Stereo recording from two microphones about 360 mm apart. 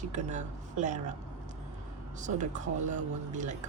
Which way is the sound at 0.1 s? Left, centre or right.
Centre.